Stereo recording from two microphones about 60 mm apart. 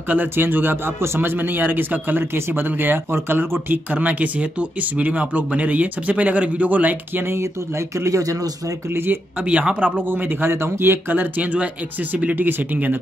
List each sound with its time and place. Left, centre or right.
0.1 s speech: right
8.0 s speech: right
8.9 s speech: right
9.4 s speech: right
11.5 s speech: right